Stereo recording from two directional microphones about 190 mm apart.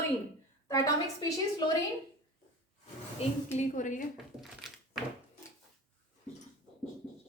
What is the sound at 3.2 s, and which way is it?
Speech, 40° left (ahead or behind).